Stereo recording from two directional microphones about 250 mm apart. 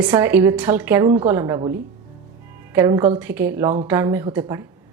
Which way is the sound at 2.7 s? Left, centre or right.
Centre.